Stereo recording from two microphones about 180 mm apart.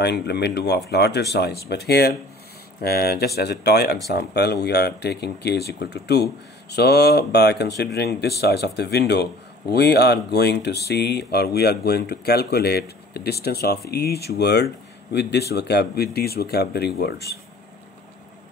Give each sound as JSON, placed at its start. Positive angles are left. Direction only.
{"t": 0.0, "sound": "speech", "side_deg": 70}